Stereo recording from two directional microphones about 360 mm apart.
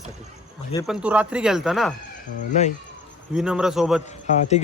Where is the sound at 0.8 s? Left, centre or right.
Centre.